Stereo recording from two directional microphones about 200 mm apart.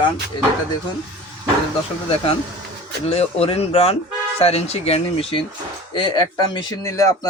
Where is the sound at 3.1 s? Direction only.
30° left (ahead or behind).